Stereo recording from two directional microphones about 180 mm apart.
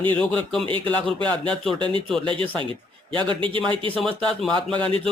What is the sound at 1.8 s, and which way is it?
Speech, 30° right (ahead or behind).